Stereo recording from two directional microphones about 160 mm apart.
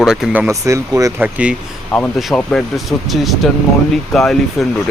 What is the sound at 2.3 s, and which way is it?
Speech, centre (ahead or behind).